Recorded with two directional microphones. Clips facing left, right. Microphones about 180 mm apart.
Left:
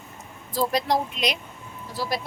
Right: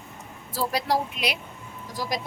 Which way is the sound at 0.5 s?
10° right (ahead or behind).